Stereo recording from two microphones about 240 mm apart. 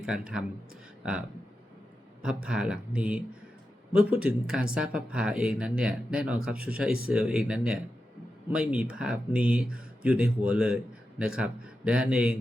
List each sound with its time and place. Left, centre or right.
0.0 s speech: centre
2.2 s a man's voice: centre